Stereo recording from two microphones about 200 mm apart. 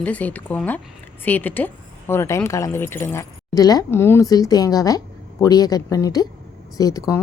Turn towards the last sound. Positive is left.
turn(degrees=15)  # may be behind; listen again after turning